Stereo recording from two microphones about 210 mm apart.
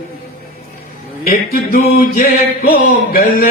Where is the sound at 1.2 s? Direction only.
45° left (ahead or behind).